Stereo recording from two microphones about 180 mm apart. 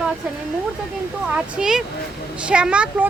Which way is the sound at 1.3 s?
5° right (ahead or behind).